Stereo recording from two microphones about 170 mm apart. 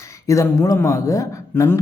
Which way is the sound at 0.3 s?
20° left (ahead or behind).